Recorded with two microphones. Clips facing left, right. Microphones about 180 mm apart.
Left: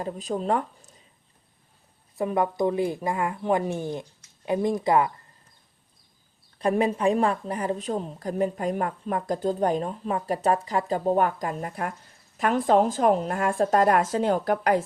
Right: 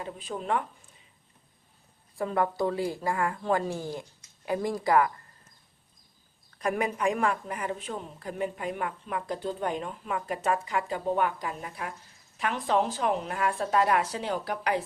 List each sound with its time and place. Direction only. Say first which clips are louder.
0.0 s a woman's voice: left 7 dB; 40° left (ahead or behind)
2.1 s a woman's voice: left 3 dB; 20° left (ahead or behind)
6.6 s a woman's voice: left 5 dB; 30° left (ahead or behind); by 14.8 s 50° left (ahead or behind)